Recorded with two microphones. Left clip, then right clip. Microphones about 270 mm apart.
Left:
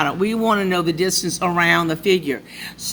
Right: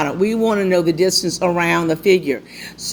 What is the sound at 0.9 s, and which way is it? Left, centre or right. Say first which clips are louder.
Speech: right 4 dB; left.